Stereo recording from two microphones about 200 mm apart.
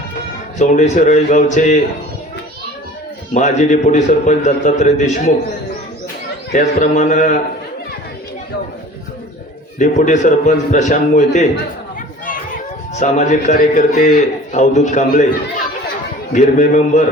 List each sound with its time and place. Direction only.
0.6 s a man's voice: 40° left (ahead or behind)
3.3 s a man's voice: 35° left (ahead or behind)
6.5 s a man's voice: 35° left (ahead or behind)
9.7 s a man's voice: 40° left (ahead or behind)
13.0 s a man's voice: 35° left (ahead or behind)
16.3 s a man's voice: 40° left (ahead or behind)